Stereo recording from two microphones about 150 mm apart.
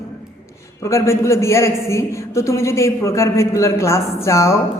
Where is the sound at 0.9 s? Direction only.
20° left (ahead or behind).